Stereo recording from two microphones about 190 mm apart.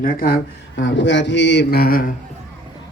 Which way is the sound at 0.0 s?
50° left (ahead or behind).